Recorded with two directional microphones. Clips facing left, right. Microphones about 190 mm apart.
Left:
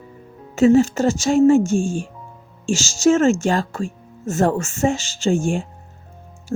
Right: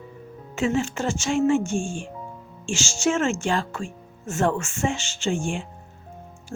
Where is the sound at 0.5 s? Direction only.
40° left (ahead or behind).